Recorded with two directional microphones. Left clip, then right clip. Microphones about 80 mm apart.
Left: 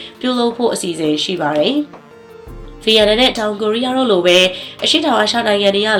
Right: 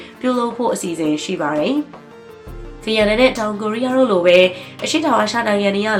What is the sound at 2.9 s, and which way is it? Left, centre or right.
A woman's voice, left.